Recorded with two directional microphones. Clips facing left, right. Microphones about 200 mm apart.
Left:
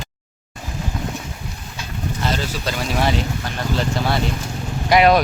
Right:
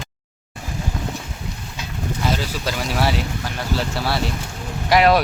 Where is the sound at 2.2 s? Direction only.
10° right (ahead or behind).